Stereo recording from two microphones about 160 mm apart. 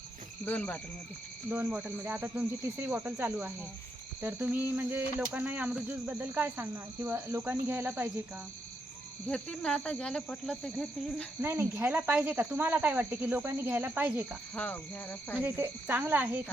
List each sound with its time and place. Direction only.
0.4 s speech: 10° left (ahead or behind)
1.5 s speech: 10° right (ahead or behind)
9.3 s speech: 5° left (ahead or behind)
11.3 s speech: 15° right (ahead or behind)
14.5 s speech: 10° left (ahead or behind)
15.4 s speech: 15° right (ahead or behind)